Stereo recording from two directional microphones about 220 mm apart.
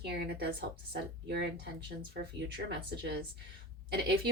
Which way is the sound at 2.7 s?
45° right (ahead or behind).